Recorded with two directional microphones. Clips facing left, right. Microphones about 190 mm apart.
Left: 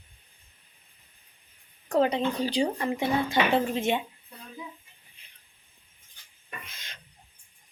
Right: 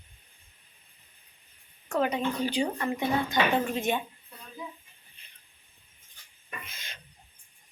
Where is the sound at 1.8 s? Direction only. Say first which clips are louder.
Left 3 dB; 35° left (ahead or behind).